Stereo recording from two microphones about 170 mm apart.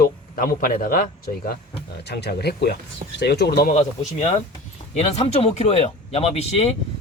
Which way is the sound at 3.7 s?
45° left (ahead or behind).